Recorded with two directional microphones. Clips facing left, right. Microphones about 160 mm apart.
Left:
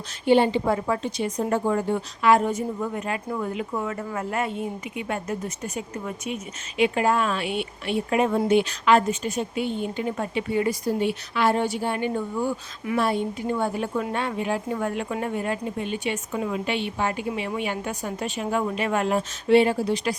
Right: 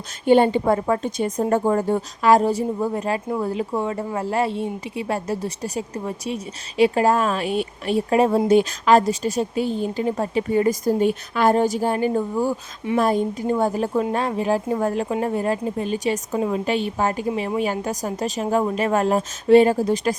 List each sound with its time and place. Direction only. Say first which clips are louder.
0.3 s a woman's voice: right 3 dB; 45° right (ahead or behind)